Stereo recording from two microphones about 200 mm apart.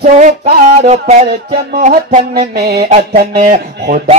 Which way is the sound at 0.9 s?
35° right (ahead or behind).